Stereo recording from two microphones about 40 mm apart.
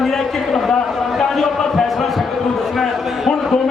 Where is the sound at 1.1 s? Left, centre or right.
Centre.